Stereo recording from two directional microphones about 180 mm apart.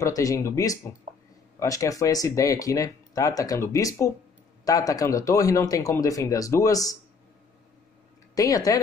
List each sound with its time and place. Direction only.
0.0 s speech: 20° left (ahead or behind)
1.1 s a sound: 35° right (ahead or behind)
1.6 s speech: 20° left (ahead or behind)
8.4 s speech: 20° left (ahead or behind)